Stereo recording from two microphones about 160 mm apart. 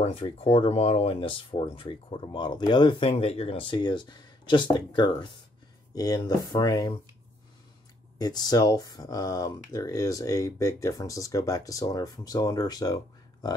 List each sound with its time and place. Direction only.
0.0 s speech: 40° left (ahead or behind)
8.2 s speech: 25° left (ahead or behind)